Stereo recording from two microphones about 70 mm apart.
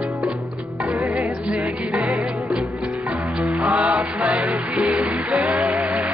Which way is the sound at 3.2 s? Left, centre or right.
Centre.